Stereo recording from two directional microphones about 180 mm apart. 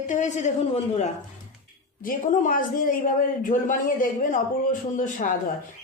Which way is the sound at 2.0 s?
50° left (ahead or behind).